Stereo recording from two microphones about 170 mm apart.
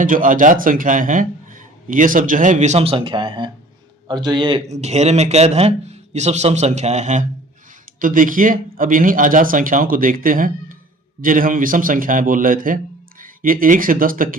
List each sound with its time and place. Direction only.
0.0 s speech: 50° right (ahead or behind); by 4.6 s 30° right (ahead or behind)
4.7 s speech: 40° right (ahead or behind)